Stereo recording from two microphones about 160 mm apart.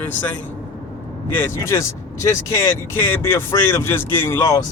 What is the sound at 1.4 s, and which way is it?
Speech, 20° left (ahead or behind).